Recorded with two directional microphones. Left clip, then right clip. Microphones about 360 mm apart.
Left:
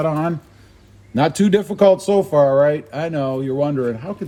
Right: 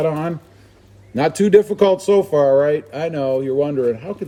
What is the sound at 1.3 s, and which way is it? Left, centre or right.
Speech, centre.